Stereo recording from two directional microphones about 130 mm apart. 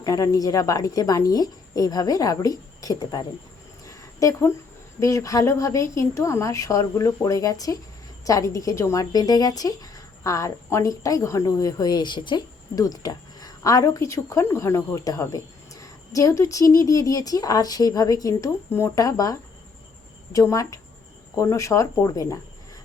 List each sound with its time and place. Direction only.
0.0 s a woman's voice: 25° left (ahead or behind)
3.8 s a sound: 25° left (ahead or behind)
4.9 s a woman's voice: 25° left (ahead or behind)